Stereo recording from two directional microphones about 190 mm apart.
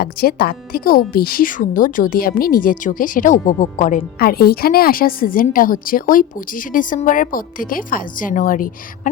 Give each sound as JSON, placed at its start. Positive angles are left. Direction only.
{"t": 0.0, "sound": "speech", "side_deg": 50}